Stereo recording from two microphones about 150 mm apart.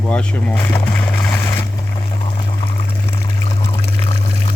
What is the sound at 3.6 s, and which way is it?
Water, 20° left (ahead or behind).